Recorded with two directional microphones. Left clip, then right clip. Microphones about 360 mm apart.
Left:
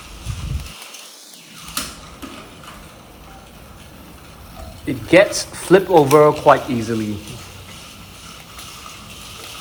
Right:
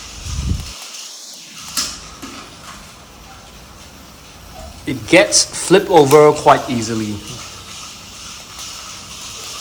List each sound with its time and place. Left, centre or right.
4.9 s speech: centre